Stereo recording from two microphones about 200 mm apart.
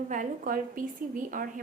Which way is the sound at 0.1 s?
40° right (ahead or behind).